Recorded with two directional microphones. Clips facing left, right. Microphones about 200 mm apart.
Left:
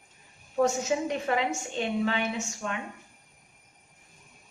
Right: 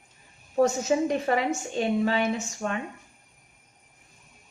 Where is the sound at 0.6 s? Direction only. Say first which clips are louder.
Right 3 dB; 40° right (ahead or behind).